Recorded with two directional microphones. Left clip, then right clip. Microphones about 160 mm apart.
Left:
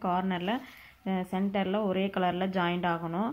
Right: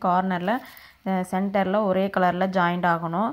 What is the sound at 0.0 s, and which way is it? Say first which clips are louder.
Speech: right 8 dB; 30° right (ahead or behind).